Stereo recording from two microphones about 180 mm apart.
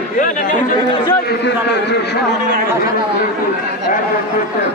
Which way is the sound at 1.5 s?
70° left (ahead or behind).